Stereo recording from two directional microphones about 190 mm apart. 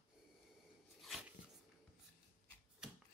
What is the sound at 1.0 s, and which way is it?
Dog, centre (ahead or behind).